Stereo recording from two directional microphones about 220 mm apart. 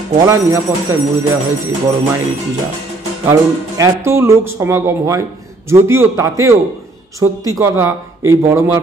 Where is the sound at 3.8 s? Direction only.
10° right (ahead or behind).